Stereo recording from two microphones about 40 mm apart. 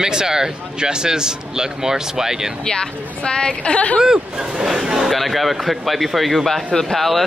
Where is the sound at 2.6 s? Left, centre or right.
Centre.